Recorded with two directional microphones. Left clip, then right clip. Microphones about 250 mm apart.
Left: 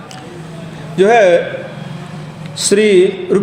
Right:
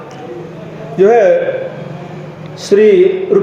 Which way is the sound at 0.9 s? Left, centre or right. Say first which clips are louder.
Right 1 dB; left.